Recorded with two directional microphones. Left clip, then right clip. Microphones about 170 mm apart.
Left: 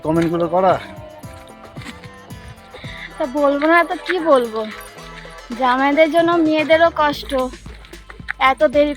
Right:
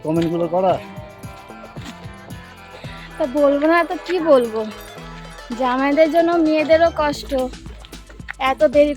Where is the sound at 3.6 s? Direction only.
25° right (ahead or behind).